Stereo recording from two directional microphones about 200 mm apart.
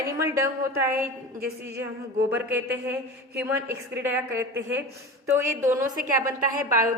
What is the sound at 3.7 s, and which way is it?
Speech, 10° right (ahead or behind).